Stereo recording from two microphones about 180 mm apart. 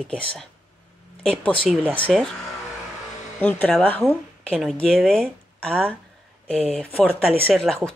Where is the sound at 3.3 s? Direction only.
5° left (ahead or behind).